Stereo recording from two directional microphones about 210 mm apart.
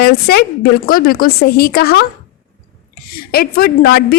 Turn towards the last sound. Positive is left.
turn(degrees=50)  # may be behind; listen again after turning